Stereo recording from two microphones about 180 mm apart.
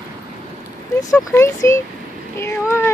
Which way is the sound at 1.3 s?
15° left (ahead or behind).